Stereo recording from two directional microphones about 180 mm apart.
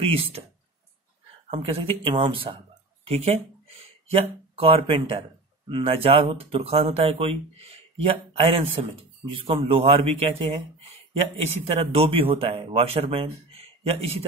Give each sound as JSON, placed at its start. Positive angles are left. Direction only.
{"t": 0.0, "sound": "speech", "side_deg": -35}
{"t": 1.5, "sound": "speech", "side_deg": -35}